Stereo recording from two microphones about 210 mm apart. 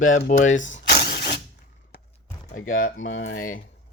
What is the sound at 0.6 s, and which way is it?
Vehicle, 40° left (ahead or behind).